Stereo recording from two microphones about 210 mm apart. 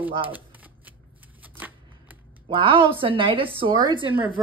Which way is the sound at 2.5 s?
25° right (ahead or behind).